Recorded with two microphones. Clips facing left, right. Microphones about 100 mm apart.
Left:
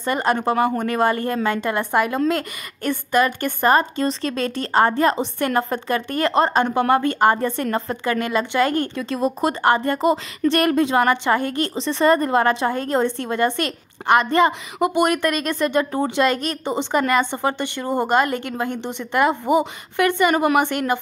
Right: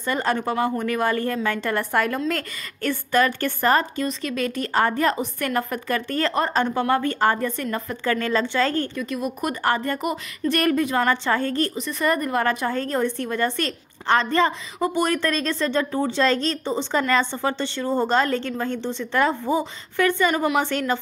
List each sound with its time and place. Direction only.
0.0 s a woman's voice: 20° left (ahead or behind)
20.2 s a woman's voice: 55° left (ahead or behind)